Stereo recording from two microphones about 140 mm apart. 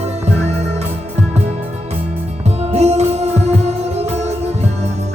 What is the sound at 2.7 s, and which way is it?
Music, 50° right (ahead or behind).